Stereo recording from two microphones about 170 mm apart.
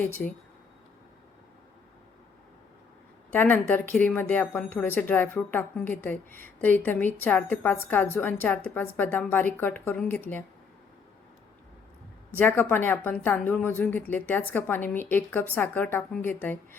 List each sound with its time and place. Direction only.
0.2 s a woman's voice: 10° left (ahead or behind)
3.3 s a woman's voice: 10° left (ahead or behind)
12.3 s a woman's voice: 10° left (ahead or behind)